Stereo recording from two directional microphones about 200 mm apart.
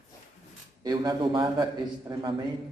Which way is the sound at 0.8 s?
20° right (ahead or behind).